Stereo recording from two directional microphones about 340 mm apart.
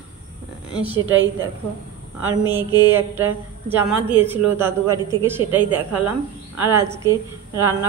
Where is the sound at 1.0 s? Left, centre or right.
Right.